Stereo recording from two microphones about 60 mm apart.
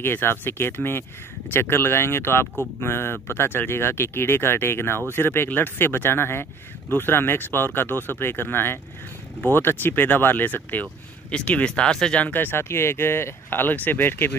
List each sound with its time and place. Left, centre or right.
0.0 s speech: left; by 12.2 s centre
12.2 s speech: left
12.6 s speech: left